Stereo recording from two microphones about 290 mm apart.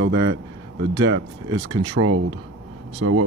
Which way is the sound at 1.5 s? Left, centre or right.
Centre.